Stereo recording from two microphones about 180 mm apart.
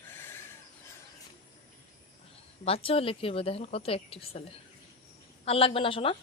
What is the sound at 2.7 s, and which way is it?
Speech, 30° left (ahead or behind).